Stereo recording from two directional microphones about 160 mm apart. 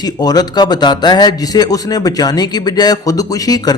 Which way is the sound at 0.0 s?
25° left (ahead or behind).